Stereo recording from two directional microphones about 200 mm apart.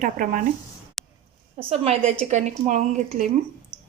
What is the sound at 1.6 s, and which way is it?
A woman's voice, 30° right (ahead or behind).